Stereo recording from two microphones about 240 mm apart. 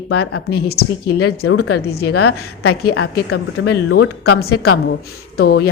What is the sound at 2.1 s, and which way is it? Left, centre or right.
Speech, left.